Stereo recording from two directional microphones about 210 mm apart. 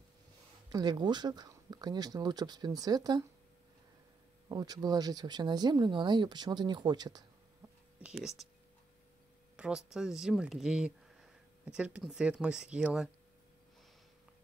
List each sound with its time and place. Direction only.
0.7 s speech: 20° right (ahead or behind)
4.5 s speech: 20° right (ahead or behind)
8.0 s speech: 5° right (ahead or behind)
9.6 s speech: 5° right (ahead or behind)